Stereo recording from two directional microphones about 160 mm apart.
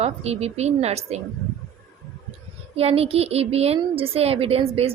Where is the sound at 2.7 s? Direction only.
40° right (ahead or behind).